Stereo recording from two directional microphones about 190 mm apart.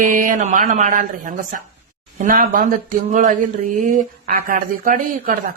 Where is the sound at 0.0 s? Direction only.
45° right (ahead or behind).